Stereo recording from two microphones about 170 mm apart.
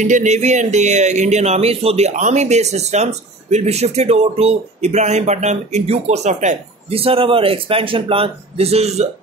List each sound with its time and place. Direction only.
0.0 s speech: 45° right (ahead or behind)